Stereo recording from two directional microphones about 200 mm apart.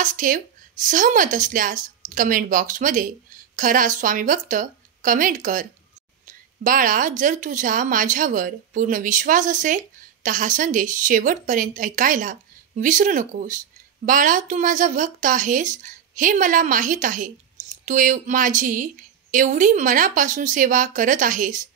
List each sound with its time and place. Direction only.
0.0 s a woman's voice: 40° right (ahead or behind)